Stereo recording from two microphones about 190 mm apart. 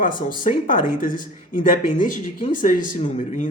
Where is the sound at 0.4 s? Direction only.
45° left (ahead or behind).